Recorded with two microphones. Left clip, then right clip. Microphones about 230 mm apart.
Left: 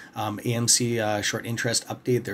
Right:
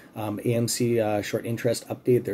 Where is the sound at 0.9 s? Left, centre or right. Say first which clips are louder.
Right 1 dB; left.